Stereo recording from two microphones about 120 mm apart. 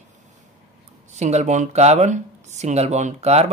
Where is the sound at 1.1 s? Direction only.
70° right (ahead or behind).